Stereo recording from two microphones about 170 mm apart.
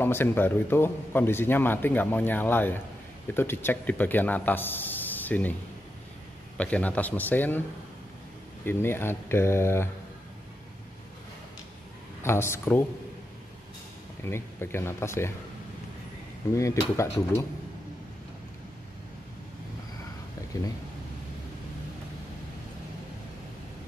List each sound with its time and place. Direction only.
0.0 s speech: 15° left (ahead or behind)
6.6 s speech: 10° left (ahead or behind)
8.6 s speech: 15° left (ahead or behind)
12.2 s speech: 15° left (ahead or behind)
14.2 s speech: 15° left (ahead or behind)
16.5 s speech: 15° left (ahead or behind)